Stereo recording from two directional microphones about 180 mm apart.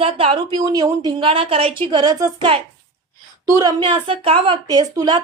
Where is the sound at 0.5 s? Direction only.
20° right (ahead or behind).